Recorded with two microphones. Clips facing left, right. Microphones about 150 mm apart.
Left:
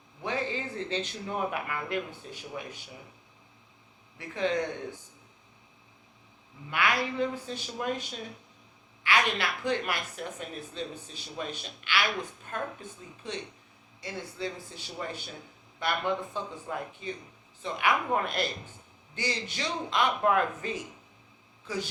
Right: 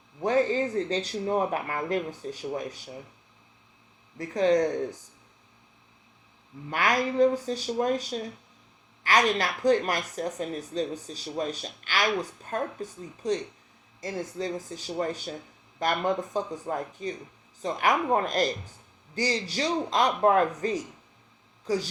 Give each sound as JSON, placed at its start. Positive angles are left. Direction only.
{"t": 0.2, "sound": "speech", "side_deg": -45}
{"t": 4.2, "sound": "speech", "side_deg": -40}
{"t": 6.7, "sound": "a woman's voice", "side_deg": -40}